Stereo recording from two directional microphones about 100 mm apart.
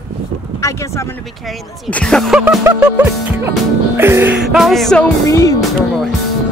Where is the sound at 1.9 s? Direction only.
5° left (ahead or behind).